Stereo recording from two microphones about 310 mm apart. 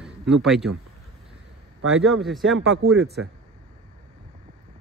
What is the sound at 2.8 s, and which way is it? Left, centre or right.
Speech, right.